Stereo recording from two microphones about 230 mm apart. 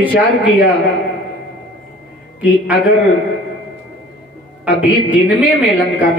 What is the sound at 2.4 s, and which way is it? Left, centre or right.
Speech, centre.